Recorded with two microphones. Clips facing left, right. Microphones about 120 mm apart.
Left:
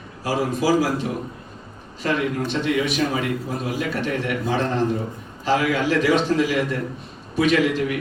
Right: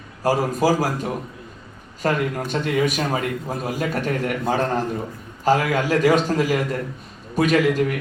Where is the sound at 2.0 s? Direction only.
45° right (ahead or behind).